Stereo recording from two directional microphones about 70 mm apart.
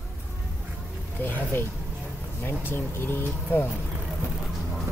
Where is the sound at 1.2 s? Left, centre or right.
Left.